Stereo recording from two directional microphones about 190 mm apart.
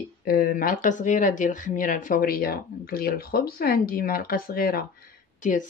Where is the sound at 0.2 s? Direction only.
50° left (ahead or behind).